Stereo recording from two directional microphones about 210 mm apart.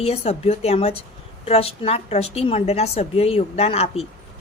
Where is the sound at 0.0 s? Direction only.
30° left (ahead or behind).